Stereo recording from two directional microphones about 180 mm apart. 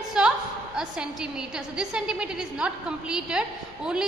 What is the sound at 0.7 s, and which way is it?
A woman's voice, 5° right (ahead or behind).